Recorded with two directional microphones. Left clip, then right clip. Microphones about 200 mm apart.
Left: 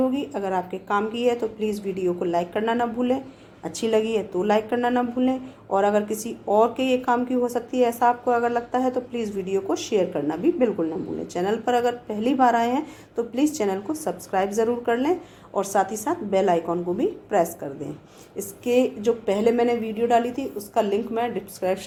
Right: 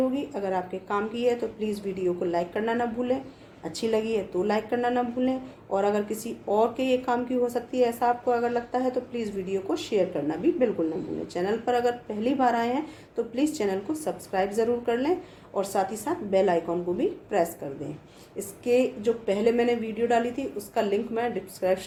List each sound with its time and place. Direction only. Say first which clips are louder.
0.0 s a woman's voice: left 3 dB; 30° left (ahead or behind)